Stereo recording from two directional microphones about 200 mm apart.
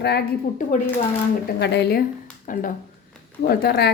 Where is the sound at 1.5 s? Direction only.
60° left (ahead or behind).